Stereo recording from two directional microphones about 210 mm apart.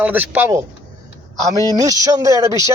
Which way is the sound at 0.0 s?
10° right (ahead or behind).